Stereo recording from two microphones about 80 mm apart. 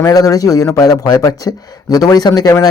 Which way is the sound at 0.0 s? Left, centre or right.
Left.